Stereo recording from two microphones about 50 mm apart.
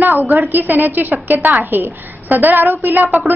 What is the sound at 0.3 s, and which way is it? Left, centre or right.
A woman's voice, right.